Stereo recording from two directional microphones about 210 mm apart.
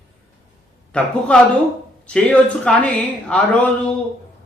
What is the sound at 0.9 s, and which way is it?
Speech, 5° left (ahead or behind).